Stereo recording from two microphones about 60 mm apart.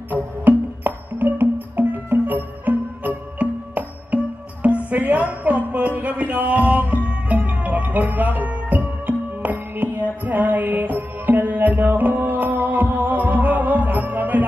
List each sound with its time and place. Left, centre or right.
0.1 s music: right